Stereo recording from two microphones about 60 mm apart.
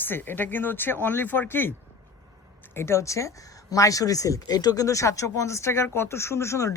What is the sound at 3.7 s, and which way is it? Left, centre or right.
Speech, left.